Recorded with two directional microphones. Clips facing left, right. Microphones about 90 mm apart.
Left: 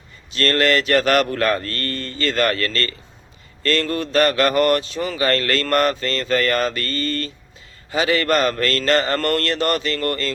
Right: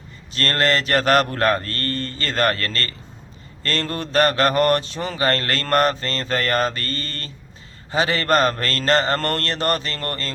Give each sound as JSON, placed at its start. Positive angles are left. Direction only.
{"t": 0.3, "sound": "a man's voice", "side_deg": -35}